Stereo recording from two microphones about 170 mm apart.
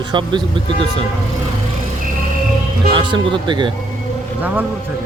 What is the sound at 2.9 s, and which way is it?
Speech, 30° right (ahead or behind).